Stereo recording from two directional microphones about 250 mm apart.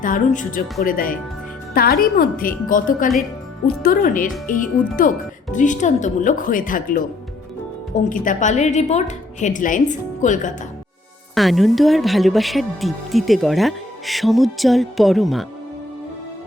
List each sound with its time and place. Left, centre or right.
0.0 s a woman's voice: left
11.3 s speech: centre